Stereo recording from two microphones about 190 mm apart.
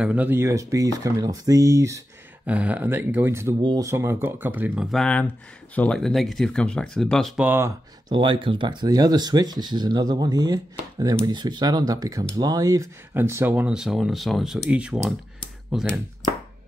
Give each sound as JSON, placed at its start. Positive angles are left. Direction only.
{"t": 0.0, "sound": "speech", "side_deg": -10}
{"t": 4.9, "sound": "speech", "side_deg": 5}
{"t": 8.1, "sound": "speech", "side_deg": -25}